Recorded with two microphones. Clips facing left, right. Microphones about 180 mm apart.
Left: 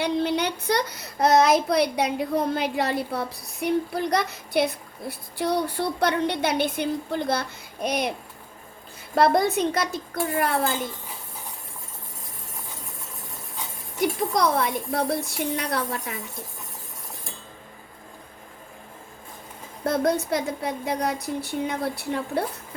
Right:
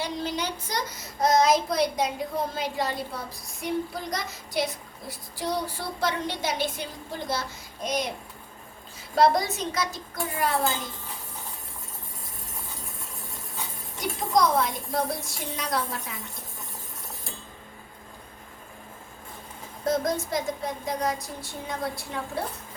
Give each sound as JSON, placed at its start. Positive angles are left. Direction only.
{"t": 0.0, "sound": "a child's voice", "side_deg": 60}
{"t": 9.1, "sound": "a child's voice", "side_deg": 55}
{"t": 14.0, "sound": "a child's voice", "side_deg": 60}
{"t": 19.8, "sound": "a child's voice", "side_deg": 65}